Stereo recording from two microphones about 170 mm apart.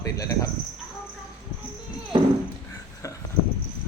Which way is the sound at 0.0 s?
20° left (ahead or behind).